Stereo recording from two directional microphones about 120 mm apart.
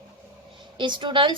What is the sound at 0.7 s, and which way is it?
Speech, 40° right (ahead or behind).